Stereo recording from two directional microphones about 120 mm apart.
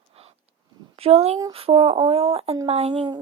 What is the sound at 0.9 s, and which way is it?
Speech, 55° right (ahead or behind).